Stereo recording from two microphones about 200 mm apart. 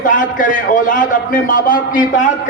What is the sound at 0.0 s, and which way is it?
A man's voice, 40° left (ahead or behind).